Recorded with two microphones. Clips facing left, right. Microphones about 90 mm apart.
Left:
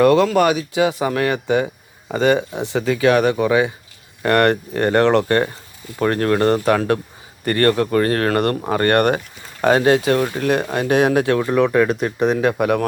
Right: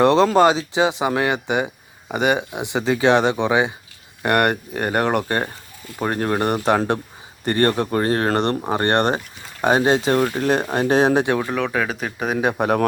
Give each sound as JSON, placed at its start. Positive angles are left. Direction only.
{"t": 0.0, "sound": "speech", "side_deg": -25}
{"t": 11.5, "sound": "speech", "side_deg": 0}
{"t": 12.5, "sound": "speech", "side_deg": -35}